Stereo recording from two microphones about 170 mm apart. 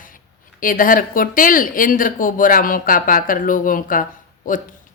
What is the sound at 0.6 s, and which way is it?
Speech, 55° left (ahead or behind).